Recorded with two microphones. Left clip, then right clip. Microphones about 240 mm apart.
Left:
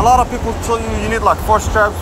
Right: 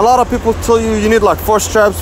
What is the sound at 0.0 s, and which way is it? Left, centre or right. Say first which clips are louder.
Speech: right 2 dB; right.